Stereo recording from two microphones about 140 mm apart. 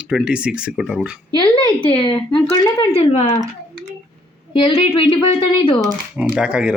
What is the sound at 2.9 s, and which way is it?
Speech, 45° left (ahead or behind).